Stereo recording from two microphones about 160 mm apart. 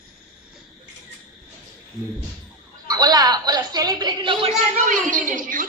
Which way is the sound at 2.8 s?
25° right (ahead or behind).